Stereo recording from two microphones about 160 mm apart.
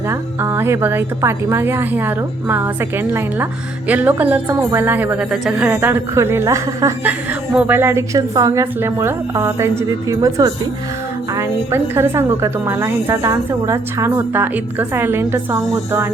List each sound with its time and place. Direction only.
0.1 s a woman's voice: 15° right (ahead or behind)